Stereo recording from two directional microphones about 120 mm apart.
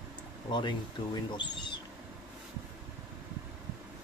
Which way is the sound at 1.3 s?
40° left (ahead or behind).